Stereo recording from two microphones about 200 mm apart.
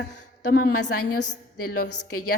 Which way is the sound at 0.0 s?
55° left (ahead or behind).